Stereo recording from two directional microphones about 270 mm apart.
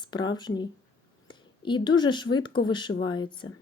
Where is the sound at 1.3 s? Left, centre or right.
Centre.